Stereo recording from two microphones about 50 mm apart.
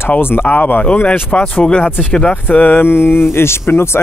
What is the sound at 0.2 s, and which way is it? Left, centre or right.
Speech, left.